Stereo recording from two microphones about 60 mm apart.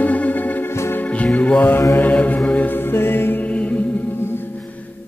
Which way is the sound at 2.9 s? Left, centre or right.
Left.